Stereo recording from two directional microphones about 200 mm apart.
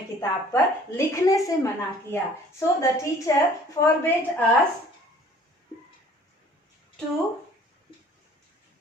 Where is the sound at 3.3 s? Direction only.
15° left (ahead or behind).